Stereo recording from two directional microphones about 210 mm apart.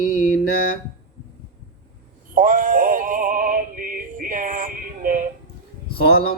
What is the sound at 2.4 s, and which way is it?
Synthetic singing, 40° right (ahead or behind).